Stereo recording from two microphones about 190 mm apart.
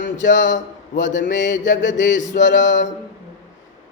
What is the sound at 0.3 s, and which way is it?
A man's voice, 70° left (ahead or behind).